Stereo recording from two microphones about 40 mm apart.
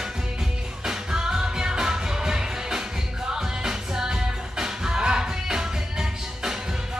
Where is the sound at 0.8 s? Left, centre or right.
Centre.